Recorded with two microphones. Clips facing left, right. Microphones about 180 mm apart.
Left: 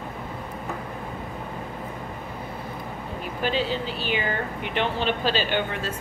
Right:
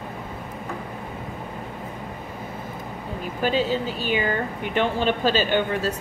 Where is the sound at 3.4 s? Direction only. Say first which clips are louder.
Right 3 dB; 45° right (ahead or behind).